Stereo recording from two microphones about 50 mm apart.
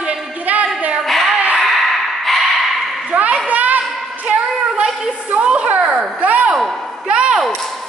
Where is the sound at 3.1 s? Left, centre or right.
Right.